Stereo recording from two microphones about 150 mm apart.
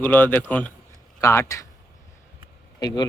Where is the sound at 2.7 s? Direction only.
25° left (ahead or behind).